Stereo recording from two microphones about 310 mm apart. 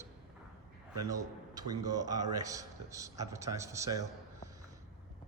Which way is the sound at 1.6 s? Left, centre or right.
Centre.